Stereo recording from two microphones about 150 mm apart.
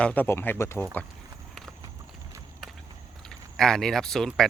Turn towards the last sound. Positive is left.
turn(degrees=5)  # may be behind; listen again after turning